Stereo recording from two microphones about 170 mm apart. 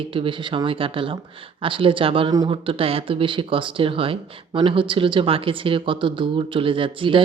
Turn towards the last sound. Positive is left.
turn(degrees=-30)  # may be behind; listen again after turning